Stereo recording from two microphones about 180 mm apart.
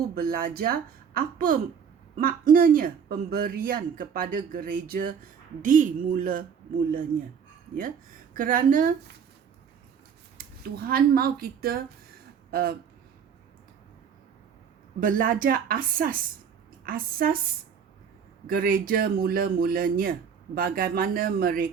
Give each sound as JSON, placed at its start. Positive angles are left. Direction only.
{"t": 0.1, "sound": "speech", "side_deg": -55}
{"t": 8.4, "sound": "speech", "side_deg": -50}
{"t": 10.3, "sound": "speech", "side_deg": -55}
{"t": 15.0, "sound": "speech", "side_deg": -50}